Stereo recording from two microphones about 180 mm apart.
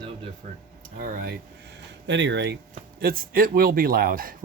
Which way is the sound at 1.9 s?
80° right.